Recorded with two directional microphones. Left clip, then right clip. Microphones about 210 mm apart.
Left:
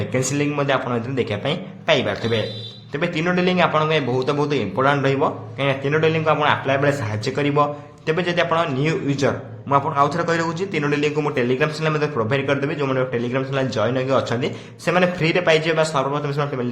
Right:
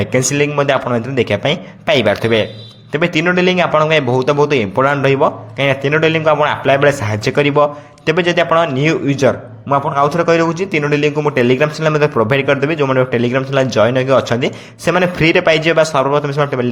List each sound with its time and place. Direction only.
0.1 s a man's voice: 35° right (ahead or behind)